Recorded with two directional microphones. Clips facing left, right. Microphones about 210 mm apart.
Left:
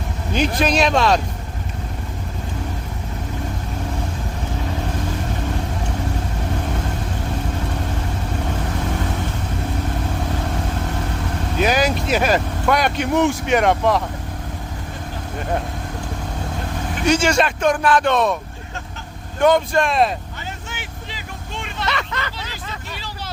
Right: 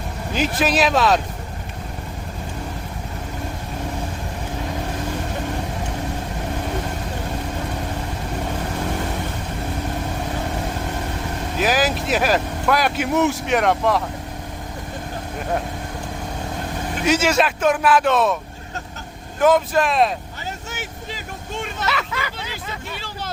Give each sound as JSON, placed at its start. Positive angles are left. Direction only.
{"t": 0.3, "sound": "speech", "side_deg": -5}
{"t": 11.5, "sound": "speech", "side_deg": 0}
{"t": 17.0, "sound": "speech", "side_deg": -5}
{"t": 19.4, "sound": "speech", "side_deg": -5}
{"t": 20.7, "sound": "vehicle", "side_deg": -45}
{"t": 21.8, "sound": "speech", "side_deg": -5}